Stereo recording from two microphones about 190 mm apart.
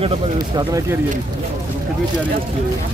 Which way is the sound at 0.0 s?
30° right (ahead or behind).